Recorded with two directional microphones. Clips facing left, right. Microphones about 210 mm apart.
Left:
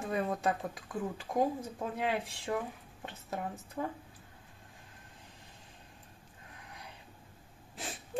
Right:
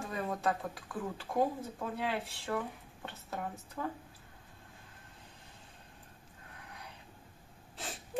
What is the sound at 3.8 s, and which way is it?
Speech, 15° left (ahead or behind).